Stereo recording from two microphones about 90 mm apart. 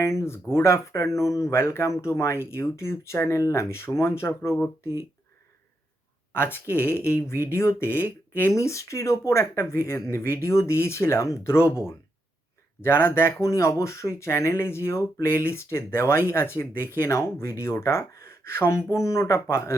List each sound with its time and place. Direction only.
0.0 s speech: 35° left (ahead or behind)
6.3 s speech: 25° left (ahead or behind)